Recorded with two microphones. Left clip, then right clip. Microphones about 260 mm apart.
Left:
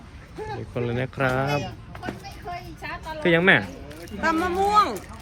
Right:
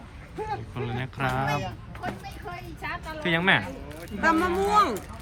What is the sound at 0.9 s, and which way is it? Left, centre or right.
Speech, centre.